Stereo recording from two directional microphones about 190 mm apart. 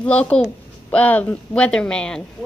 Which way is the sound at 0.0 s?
5° left (ahead or behind).